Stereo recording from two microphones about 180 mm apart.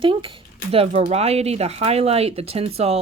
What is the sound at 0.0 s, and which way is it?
Speech, 30° right (ahead or behind).